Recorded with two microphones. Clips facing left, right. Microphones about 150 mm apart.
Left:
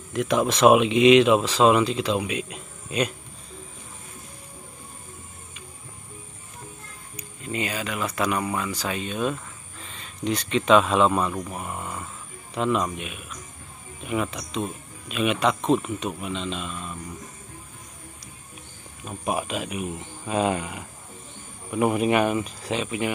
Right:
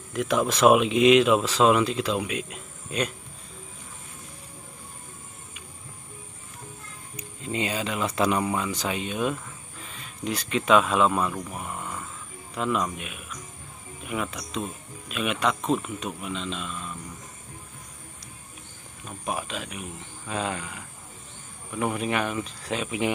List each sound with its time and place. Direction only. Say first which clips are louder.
0.1 s speech: left 2 dB; centre (ahead or behind)
7.2 s speech: even; 25° right (ahead or behind)
8.4 s speech: right 1 dB; 15° right (ahead or behind); by 11.7 s 10° left (ahead or behind)
11.7 s a sound: left 2 dB; 15° left (ahead or behind)
12.5 s speech: left 3 dB; centre (ahead or behind)
19.0 s speech: left 4 dB; 10° left (ahead or behind)
22.8 s speech: even; 15° right (ahead or behind)